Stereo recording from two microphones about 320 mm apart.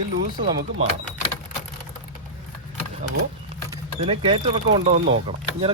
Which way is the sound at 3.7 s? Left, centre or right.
Centre.